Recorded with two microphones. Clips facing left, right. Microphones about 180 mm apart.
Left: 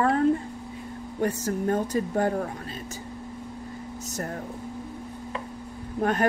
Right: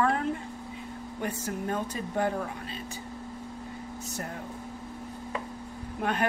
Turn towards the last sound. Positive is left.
turn(degrees=45)  # may be behind; listen again after turning